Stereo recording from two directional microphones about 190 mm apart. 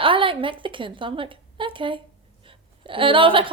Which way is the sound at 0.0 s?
25° right (ahead or behind).